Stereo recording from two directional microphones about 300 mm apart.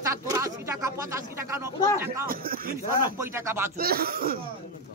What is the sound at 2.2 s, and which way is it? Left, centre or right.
Speech, right.